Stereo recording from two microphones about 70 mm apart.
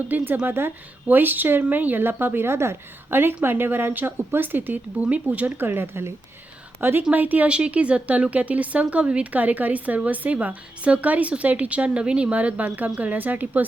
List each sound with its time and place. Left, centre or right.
0.1 s a woman's voice: right
5.6 s a woman's voice: right